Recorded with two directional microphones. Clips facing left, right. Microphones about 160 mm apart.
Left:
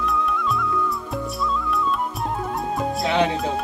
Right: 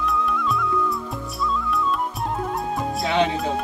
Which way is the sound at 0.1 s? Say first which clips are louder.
Even; centre (ahead or behind).